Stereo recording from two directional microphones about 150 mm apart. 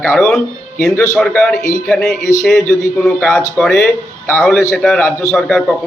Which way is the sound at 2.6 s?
20° left (ahead or behind).